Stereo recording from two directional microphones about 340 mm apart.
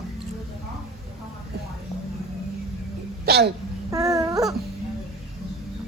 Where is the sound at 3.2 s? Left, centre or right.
Right.